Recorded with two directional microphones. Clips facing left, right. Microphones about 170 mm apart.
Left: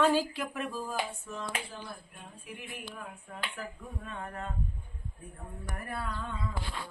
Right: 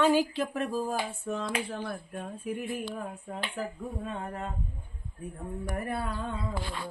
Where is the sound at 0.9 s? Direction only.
65° right (ahead or behind).